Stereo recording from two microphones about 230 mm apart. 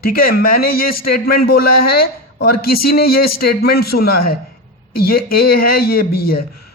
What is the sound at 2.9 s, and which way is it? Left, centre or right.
A man's voice, left.